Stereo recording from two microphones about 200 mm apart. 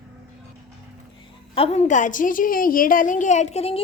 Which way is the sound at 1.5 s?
30° left (ahead or behind).